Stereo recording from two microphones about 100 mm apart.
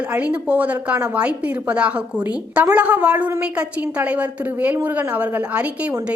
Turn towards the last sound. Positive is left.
turn(degrees=-15)  # may be behind; listen again after turning